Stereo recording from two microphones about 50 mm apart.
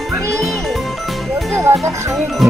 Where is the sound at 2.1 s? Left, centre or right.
Centre.